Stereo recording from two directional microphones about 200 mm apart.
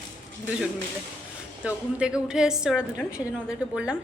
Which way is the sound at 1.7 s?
5° right (ahead or behind).